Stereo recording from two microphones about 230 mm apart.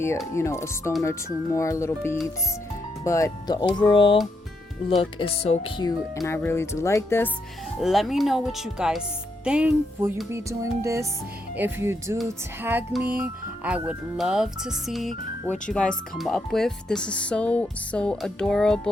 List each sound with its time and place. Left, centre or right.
0.3 s speech: centre
6.2 s speech: centre
7.8 s speech: centre
9.4 s music: centre
12.1 s speech: centre